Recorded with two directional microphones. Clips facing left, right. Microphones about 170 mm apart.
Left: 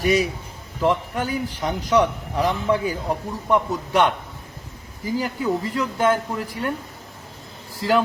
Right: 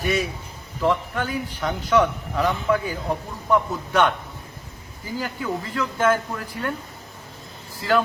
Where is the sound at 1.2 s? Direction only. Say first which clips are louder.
Left 2 dB; 15° left (ahead or behind).